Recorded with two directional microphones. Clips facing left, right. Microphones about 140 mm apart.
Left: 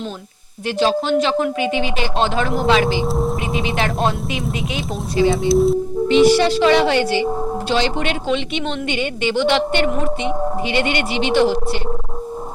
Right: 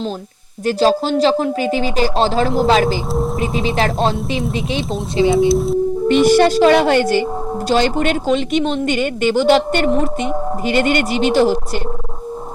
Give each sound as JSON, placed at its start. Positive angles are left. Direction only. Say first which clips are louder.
{"t": 0.6, "sound": "speech", "louder": "right 3 dB", "side_deg": -40}
{"t": 3.1, "sound": "speech", "louder": "right 1 dB", "side_deg": 0}
{"t": 3.6, "sound": "speech", "louder": "right 3 dB", "side_deg": -35}
{"t": 5.5, "sound": "speech", "louder": "left 1 dB", "side_deg": 0}
{"t": 6.1, "sound": "a woman's voice", "louder": "right 1 dB", "side_deg": -50}